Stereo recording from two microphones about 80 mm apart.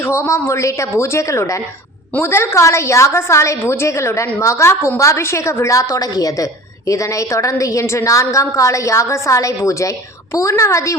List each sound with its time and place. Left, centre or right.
0.0 s a woman's voice: left